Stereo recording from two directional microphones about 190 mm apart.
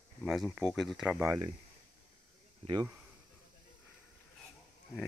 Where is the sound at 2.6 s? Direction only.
25° right (ahead or behind).